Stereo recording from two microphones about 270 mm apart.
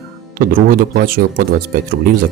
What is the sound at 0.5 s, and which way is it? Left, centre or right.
Speech, right.